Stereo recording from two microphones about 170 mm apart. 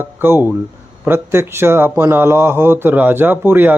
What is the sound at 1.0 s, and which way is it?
Speech, 15° right (ahead or behind).